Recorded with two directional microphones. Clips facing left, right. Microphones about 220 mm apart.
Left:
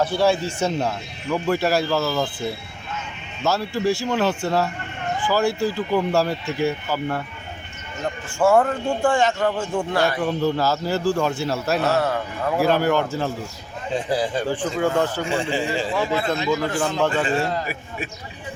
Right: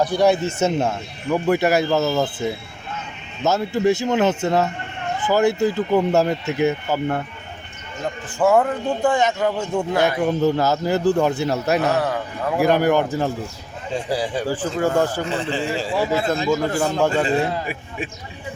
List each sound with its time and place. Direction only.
0.0 s speech: 15° right (ahead or behind)
3.4 s speech: 20° right (ahead or behind)
8.5 s speech: 5° right (ahead or behind)
9.0 s speech: 20° right (ahead or behind)
9.4 s speech: 10° right (ahead or behind)
9.9 s speech: 20° right (ahead or behind)
15.2 s a man's voice: 10° left (ahead or behind)
15.8 s speech: 5° right (ahead or behind)
16.4 s speech: 45° right (ahead or behind)